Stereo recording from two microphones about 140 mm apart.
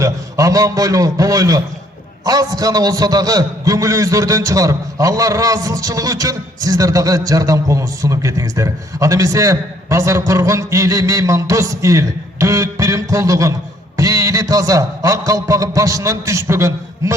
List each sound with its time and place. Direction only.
0.0 s a man's voice: 25° right (ahead or behind)